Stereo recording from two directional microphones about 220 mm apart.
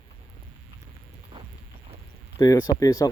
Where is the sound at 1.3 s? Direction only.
25° right (ahead or behind).